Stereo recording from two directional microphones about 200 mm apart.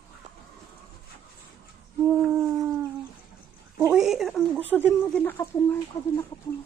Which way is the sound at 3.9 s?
Centre (ahead or behind).